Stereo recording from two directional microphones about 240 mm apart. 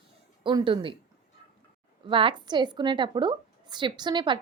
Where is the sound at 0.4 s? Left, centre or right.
Right.